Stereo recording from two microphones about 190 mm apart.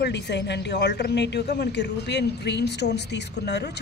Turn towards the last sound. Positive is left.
turn(degrees=60)  # may be behind; listen again after turning